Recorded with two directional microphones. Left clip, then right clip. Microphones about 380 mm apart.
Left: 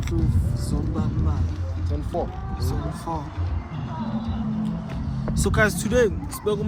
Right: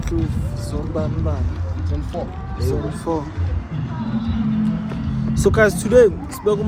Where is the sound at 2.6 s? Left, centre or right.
Centre.